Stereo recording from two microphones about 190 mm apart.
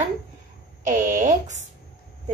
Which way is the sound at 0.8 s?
40° right (ahead or behind).